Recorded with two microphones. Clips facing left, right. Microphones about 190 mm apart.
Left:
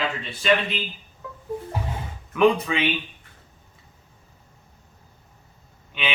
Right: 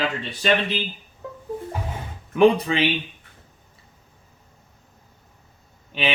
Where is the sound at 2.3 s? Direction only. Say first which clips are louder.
Right 3 dB; 30° right (ahead or behind).